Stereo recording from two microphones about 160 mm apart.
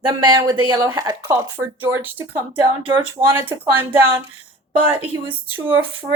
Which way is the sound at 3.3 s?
15° right (ahead or behind).